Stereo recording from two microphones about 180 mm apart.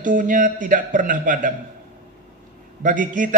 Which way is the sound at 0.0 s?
45° right (ahead or behind).